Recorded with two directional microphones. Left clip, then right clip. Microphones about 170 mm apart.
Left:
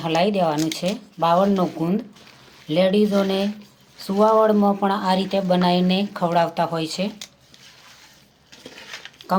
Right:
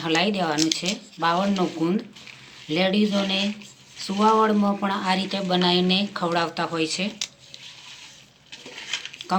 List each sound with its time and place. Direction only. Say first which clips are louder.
0.0 s speech: left 3 dB; 70° left (ahead or behind)
4.3 s speech: left 2 dB; 65° left (ahead or behind); by 7.1 s 90° left